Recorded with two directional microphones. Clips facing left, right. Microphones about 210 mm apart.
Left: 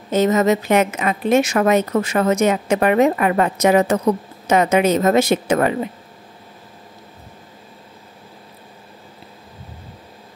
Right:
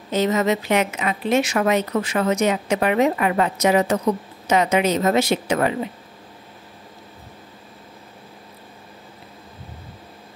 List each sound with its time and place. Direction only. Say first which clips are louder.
0.1 s a woman's voice: left 4 dB; 45° left (ahead or behind)